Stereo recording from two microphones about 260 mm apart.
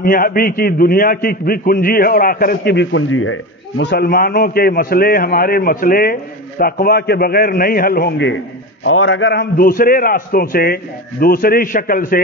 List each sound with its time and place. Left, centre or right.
0.0 s a man's voice: left